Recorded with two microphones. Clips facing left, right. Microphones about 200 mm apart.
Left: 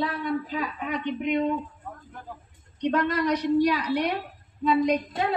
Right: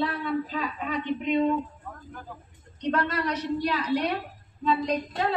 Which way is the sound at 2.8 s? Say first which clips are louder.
Left 3 dB; 15° left (ahead or behind).